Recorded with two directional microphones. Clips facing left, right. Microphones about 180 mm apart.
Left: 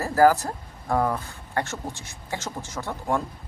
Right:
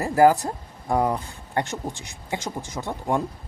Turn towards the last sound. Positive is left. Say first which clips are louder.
# right 1 dB
turn(degrees=-15)  # may be behind; listen again after turning